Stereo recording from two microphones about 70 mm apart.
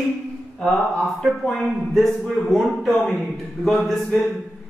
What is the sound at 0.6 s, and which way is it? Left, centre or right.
Speech, centre.